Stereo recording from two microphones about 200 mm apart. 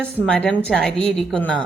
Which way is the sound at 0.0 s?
5° left (ahead or behind).